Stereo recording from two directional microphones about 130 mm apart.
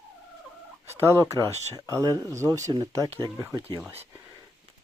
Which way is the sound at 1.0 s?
20° right (ahead or behind).